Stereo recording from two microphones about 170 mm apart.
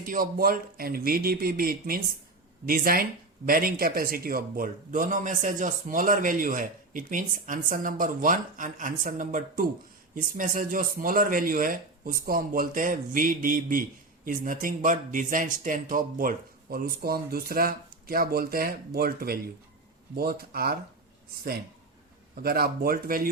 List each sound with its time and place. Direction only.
0.0 s speech: 55° right (ahead or behind)
22.4 s speech: 60° right (ahead or behind)